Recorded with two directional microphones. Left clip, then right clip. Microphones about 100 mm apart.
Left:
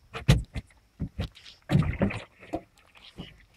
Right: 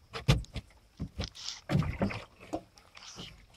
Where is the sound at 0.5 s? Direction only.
10° right (ahead or behind).